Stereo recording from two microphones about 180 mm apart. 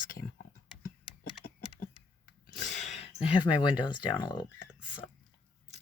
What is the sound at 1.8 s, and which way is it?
Computer keyboard, 45° left (ahead or behind).